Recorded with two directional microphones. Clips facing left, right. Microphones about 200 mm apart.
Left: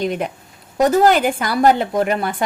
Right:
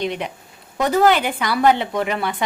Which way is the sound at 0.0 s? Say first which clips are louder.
Left 3 dB; 45° left (ahead or behind).